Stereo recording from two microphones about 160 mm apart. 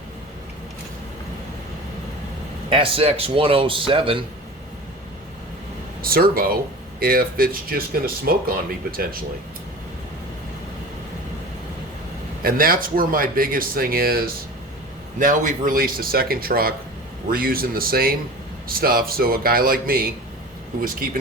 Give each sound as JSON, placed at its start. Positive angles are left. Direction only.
{"t": 2.6, "sound": "speech", "side_deg": -35}
{"t": 6.0, "sound": "speech", "side_deg": -65}
{"t": 12.4, "sound": "speech", "side_deg": -65}
{"t": 15.2, "sound": "speech", "side_deg": -55}